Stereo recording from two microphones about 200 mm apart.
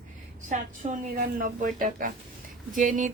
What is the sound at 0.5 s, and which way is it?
A woman's voice, 40° right (ahead or behind).